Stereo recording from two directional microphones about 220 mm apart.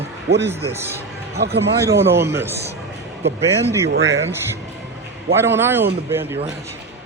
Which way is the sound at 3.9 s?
55° right (ahead or behind).